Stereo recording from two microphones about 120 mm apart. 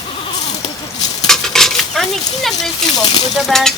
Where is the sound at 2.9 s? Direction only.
35° left (ahead or behind).